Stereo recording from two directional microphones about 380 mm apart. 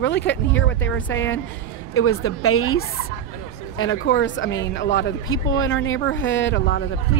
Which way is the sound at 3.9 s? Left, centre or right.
Left.